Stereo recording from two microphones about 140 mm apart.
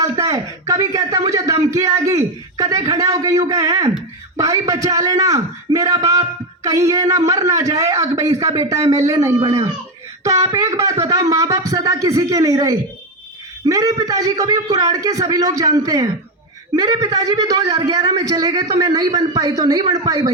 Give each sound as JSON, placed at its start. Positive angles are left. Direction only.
{"t": 0.0, "sound": "a man's voice", "side_deg": -20}